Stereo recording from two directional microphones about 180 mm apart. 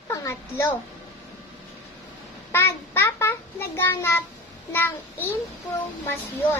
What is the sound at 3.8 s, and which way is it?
A child's voice, 15° left (ahead or behind).